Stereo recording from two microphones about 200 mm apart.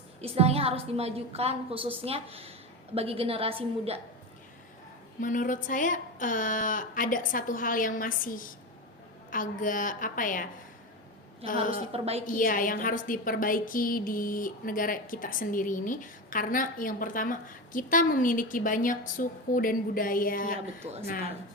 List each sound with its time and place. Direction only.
0.2 s a woman's voice: 30° right (ahead or behind)
5.2 s a woman's voice: 40° left (ahead or behind)
11.6 s a woman's voice: 40° left (ahead or behind)
11.9 s a woman's voice: 30° right (ahead or behind)
12.2 s a woman's voice: 45° left (ahead or behind)